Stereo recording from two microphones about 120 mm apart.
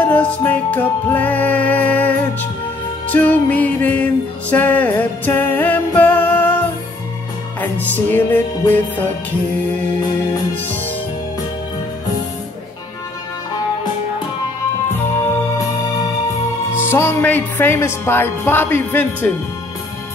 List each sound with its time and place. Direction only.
0.1 s music: 10° left (ahead or behind)
7.6 s music: 15° left (ahead or behind)
16.7 s music: 20° left (ahead or behind)